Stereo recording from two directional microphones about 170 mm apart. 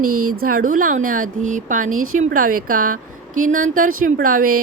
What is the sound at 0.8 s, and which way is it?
Speech, 50° right (ahead or behind).